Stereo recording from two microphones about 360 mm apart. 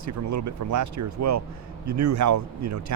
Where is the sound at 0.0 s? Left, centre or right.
Right.